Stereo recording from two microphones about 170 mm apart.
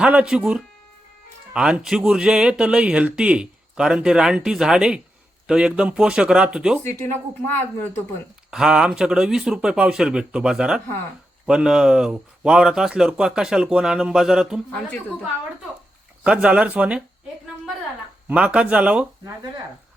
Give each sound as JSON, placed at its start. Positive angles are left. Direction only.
{"t": 0.0, "sound": "speech", "side_deg": -5}
{"t": 8.4, "sound": "speech", "side_deg": -5}
{"t": 16.2, "sound": "speech", "side_deg": -5}
{"t": 18.3, "sound": "speech", "side_deg": -5}